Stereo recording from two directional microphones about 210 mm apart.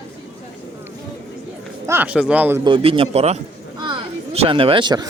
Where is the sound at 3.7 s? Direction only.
20° right (ahead or behind).